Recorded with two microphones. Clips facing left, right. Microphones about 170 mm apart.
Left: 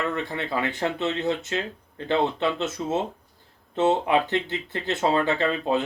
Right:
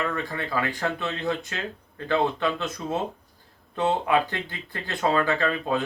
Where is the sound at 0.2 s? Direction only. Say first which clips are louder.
Left 1 dB; 25° left (ahead or behind).